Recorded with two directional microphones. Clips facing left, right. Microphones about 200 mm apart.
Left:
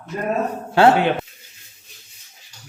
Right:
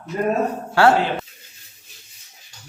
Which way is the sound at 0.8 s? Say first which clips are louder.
Left 2 dB; 20° left (ahead or behind).